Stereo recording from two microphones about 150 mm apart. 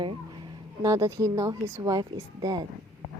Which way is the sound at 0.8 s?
20° right (ahead or behind).